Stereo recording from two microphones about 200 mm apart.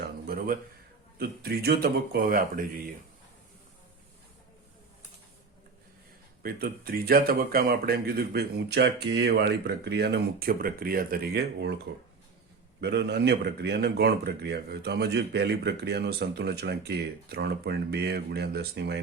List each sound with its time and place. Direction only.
0.3 s a sound: 50° right (ahead or behind)
1.2 s a man's voice: 50° right (ahead or behind)
6.4 s a man's voice: 50° right (ahead or behind)
12.8 s a man's voice: 55° right (ahead or behind)